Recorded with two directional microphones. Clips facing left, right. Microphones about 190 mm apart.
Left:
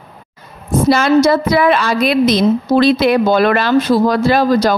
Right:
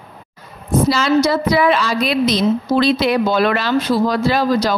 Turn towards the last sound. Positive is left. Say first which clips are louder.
# left 4 dB
turn(degrees=50)  # may be behind; listen again after turning